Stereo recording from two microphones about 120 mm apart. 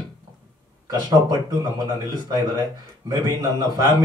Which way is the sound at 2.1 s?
30° right (ahead or behind).